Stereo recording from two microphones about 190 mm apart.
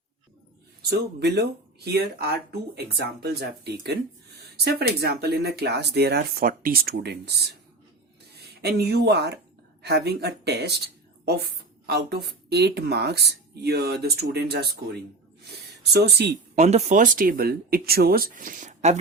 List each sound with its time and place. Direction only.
0.8 s speech: 55° right (ahead or behind)
11.9 s speech: 55° right (ahead or behind)
16.6 s speech: 35° right (ahead or behind)